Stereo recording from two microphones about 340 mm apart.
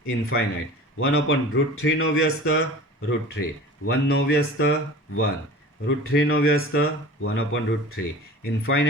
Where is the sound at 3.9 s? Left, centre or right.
Left.